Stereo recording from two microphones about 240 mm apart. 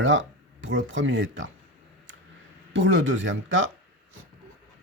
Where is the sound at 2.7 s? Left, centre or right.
Right.